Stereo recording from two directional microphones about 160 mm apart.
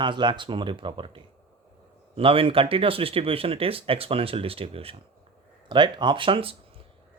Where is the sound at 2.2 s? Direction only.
35° right (ahead or behind).